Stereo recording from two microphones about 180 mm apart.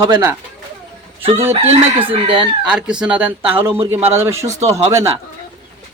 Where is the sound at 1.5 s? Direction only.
35° right (ahead or behind).